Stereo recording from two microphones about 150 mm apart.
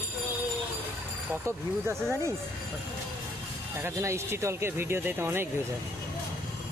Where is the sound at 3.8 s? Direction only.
15° right (ahead or behind).